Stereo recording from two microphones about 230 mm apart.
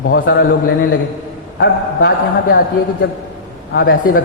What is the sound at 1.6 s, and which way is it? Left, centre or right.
Speech, left.